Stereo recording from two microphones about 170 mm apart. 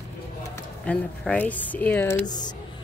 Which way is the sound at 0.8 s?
5° left (ahead or behind).